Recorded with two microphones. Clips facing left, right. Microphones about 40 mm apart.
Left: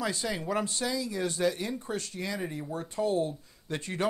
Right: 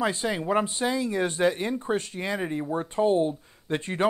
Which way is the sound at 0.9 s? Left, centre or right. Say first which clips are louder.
Right 5 dB; right.